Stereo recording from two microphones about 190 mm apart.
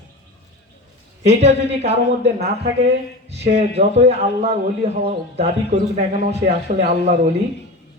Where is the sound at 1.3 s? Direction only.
35° right (ahead or behind).